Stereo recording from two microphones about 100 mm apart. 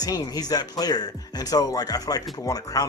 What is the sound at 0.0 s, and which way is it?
Speech, 40° left (ahead or behind).